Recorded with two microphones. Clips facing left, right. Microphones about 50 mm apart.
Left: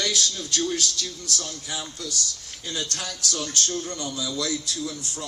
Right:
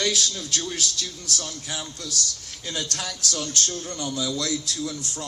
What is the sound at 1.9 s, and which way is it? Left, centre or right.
A man's voice, right.